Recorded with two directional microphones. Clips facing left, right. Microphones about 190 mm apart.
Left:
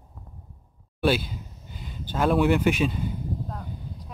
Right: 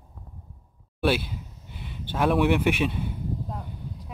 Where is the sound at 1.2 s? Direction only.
70° right (ahead or behind).